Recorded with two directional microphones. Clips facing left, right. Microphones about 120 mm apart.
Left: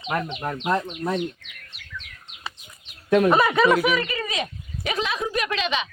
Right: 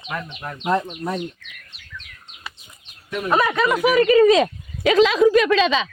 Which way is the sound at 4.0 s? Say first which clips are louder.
Right 15 dB; 65° right (ahead or behind).